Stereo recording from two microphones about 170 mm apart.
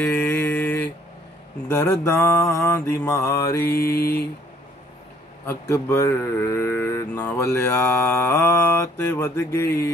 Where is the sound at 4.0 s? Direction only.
65° left (ahead or behind).